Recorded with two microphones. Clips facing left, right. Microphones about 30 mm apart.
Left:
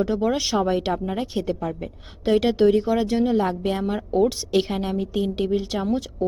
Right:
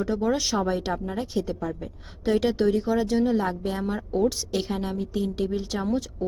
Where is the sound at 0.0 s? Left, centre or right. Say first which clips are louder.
Left 3 dB; centre.